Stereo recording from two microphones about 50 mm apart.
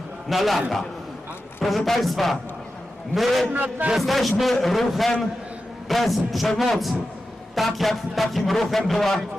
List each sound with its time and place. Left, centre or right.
0.3 s speech: centre
1.6 s speech: centre
3.5 s a man's voice: right
3.9 s speech: centre